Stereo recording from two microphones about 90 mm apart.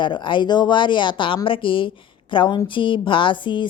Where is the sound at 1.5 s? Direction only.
75° left (ahead or behind).